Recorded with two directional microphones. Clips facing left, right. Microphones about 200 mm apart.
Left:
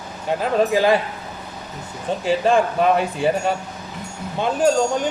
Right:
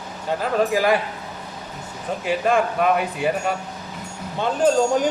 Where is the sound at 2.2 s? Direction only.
30° left (ahead or behind).